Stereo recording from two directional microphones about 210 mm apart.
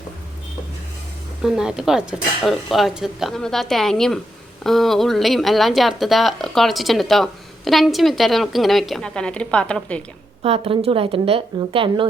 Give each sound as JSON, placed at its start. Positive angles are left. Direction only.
{"t": 1.4, "sound": "a woman's voice", "side_deg": 0}
{"t": 10.4, "sound": "a woman's voice", "side_deg": -25}